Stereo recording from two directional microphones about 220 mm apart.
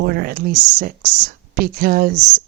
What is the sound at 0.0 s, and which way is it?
A woman's voice, 45° right (ahead or behind).